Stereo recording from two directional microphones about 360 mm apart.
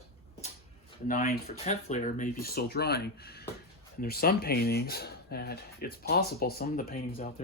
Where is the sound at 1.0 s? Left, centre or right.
Left.